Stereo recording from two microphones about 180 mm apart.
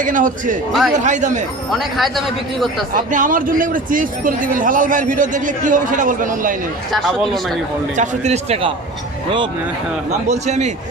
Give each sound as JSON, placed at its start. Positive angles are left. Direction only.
{"t": 0.0, "sound": "speech", "side_deg": -50}
{"t": 0.7, "sound": "speech", "side_deg": 0}
{"t": 0.9, "sound": "speech", "side_deg": -45}
{"t": 1.7, "sound": "speech", "side_deg": 0}
{"t": 2.9, "sound": "speech", "side_deg": -45}
{"t": 7.9, "sound": "a man's voice", "side_deg": -40}
{"t": 10.1, "sound": "a man's voice", "side_deg": -40}